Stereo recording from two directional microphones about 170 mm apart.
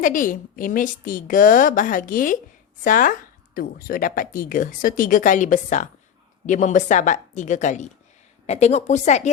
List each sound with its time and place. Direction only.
0.0 s a woman's voice: 50° left (ahead or behind)